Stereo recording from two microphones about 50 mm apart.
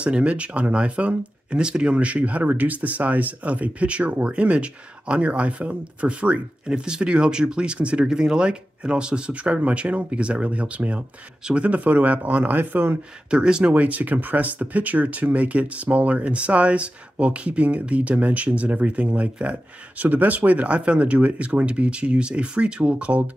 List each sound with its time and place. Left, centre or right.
0.0 s speech: right
13.3 s speech: centre